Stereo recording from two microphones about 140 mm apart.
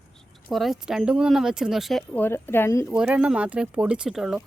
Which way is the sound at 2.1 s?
15° left (ahead or behind).